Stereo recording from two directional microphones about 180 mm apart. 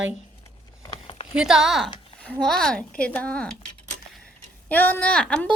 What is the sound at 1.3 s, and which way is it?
A woman's voice, 5° right (ahead or behind).